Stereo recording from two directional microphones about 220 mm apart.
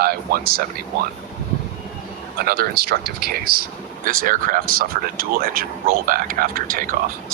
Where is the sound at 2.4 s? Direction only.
45° right (ahead or behind).